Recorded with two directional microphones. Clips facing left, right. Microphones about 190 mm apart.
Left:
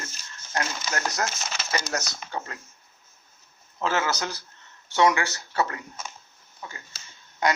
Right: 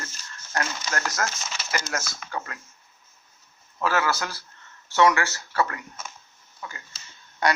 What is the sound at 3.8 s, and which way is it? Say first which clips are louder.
Speech: right 1 dB; 20° left (ahead or behind).